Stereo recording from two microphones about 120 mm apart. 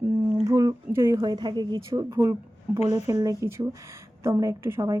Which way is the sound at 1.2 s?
40° right (ahead or behind).